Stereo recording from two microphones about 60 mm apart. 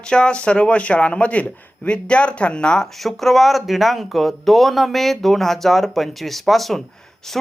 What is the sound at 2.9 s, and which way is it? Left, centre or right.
Speech, centre.